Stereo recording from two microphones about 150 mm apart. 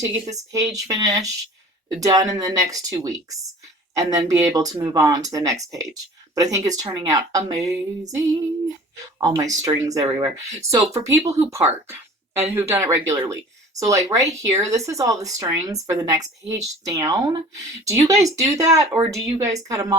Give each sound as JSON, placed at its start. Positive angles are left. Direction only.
{"t": 0.3, "sound": "a woman's voice", "side_deg": -20}
{"t": 9.2, "sound": "a woman's voice", "side_deg": -25}